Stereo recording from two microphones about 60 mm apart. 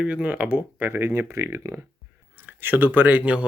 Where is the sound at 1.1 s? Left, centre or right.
Right.